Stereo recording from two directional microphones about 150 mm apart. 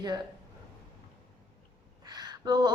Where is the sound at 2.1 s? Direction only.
25° right (ahead or behind).